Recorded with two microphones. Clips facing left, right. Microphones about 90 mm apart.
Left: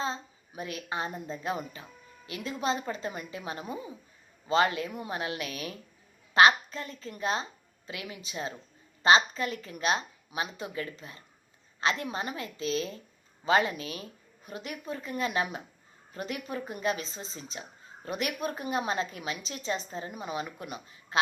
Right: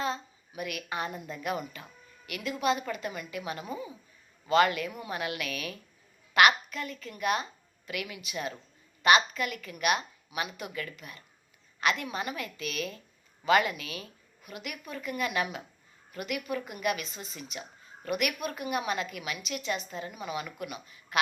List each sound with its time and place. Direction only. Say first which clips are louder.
0.0 s a woman's voice: right 1 dB; 30° left (ahead or behind)